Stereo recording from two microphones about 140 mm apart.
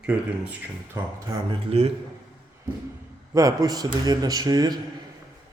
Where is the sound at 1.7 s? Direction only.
50° right (ahead or behind).